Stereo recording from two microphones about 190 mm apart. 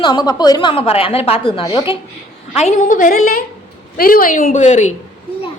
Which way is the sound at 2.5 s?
40° left (ahead or behind).